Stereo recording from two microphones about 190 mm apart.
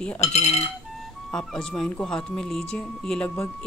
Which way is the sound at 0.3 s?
35° left (ahead or behind).